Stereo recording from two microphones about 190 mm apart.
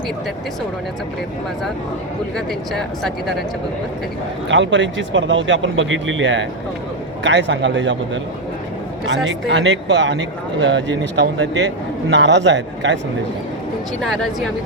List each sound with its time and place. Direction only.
2.3 s speech: centre (ahead or behind)
4.4 s speech: 75° right (ahead or behind)
9.2 s speech: 75° right (ahead or behind)
14.0 s speech: centre (ahead or behind)